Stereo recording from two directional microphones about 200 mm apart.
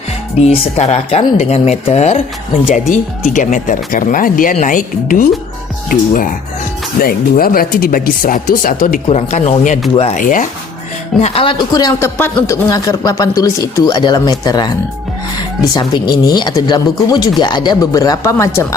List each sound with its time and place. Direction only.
0.3 s speech: 35° left (ahead or behind)
11.2 s speech: 25° left (ahead or behind)
15.7 s speech: 20° left (ahead or behind)